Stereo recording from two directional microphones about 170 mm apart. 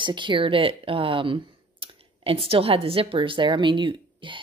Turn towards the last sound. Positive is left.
turn(degrees=-30)  # may be behind; listen again after turning